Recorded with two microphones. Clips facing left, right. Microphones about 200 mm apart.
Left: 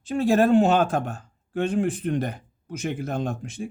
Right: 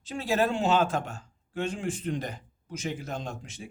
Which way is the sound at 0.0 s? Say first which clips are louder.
Left 7 dB; 55° left (ahead or behind).